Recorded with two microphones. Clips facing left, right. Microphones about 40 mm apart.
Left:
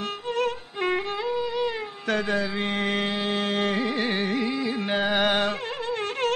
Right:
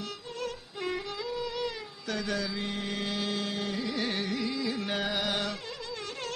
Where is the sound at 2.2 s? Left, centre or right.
Left.